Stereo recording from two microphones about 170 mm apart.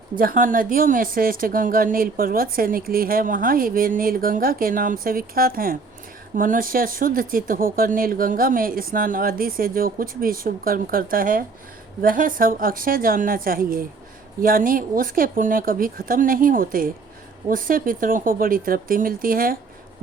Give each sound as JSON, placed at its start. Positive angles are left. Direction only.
{"t": 0.2, "sound": "speech", "side_deg": -55}